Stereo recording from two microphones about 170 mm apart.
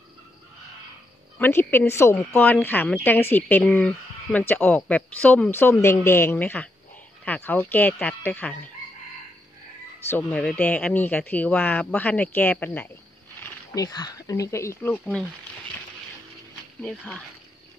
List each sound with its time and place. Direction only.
1.4 s a woman's voice: 10° left (ahead or behind)
9.9 s a woman's voice: 10° left (ahead or behind)
13.4 s speech: 20° left (ahead or behind)
16.8 s a woman's voice: 10° left (ahead or behind)